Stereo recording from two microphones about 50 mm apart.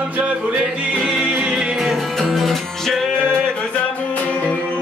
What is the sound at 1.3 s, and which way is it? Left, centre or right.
Music, centre.